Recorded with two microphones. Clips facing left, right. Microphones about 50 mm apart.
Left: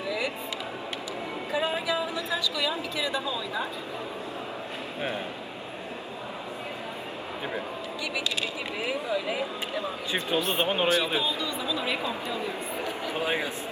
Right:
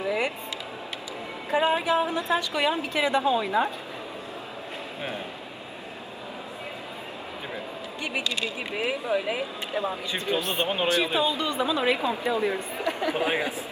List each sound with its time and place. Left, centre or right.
0.0 s a sound: right
1.5 s a woman's voice: right
8.8 s speech: right
10.6 s speech: centre
10.9 s speech: right
12.8 s chatter: right